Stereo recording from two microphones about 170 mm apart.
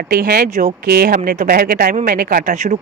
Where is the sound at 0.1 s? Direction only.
60° right (ahead or behind).